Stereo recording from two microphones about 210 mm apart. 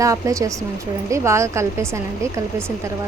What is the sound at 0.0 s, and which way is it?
Speech, 15° right (ahead or behind).